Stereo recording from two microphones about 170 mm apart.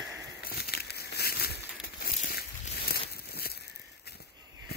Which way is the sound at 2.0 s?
60° left (ahead or behind).